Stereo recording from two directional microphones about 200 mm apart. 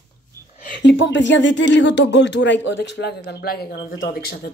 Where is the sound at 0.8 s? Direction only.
65° left (ahead or behind).